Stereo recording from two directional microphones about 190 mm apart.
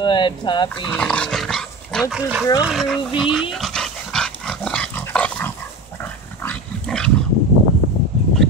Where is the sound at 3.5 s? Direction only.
Centre (ahead or behind).